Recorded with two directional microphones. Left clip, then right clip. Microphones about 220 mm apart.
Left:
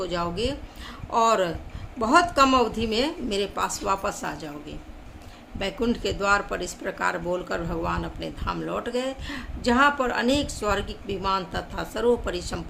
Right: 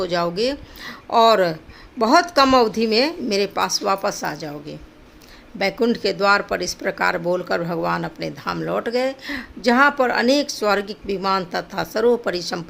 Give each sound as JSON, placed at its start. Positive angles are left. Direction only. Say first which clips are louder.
{"t": 0.0, "sound": "a woman's voice", "louder": "right 7 dB", "side_deg": -35}